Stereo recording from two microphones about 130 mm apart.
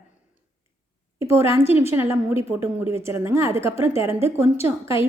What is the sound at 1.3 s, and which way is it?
Speech, 20° right (ahead or behind).